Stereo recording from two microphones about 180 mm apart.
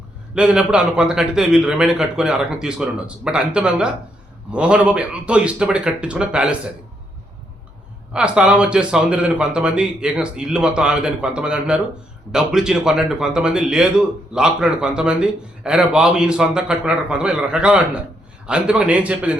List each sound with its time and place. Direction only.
0.3 s a man's voice: 5° right (ahead or behind)
8.1 s a man's voice: 5° right (ahead or behind)